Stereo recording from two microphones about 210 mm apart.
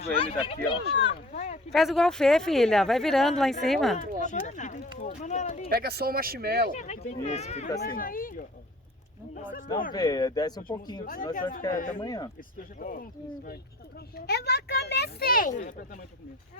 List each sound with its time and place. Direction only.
0.0 s speech: 30° left (ahead or behind)
1.7 s speech: centre (ahead or behind)
4.2 s speech: 35° left (ahead or behind)
5.7 s speech: 50° right (ahead or behind)
6.7 s speech: 35° left (ahead or behind)
7.8 s speech: 45° left (ahead or behind)
9.9 s speech: 20° left (ahead or behind)
11.0 s speech: 40° left (ahead or behind)
11.9 s speech: 20° left (ahead or behind)
12.8 s speech: 40° left (ahead or behind)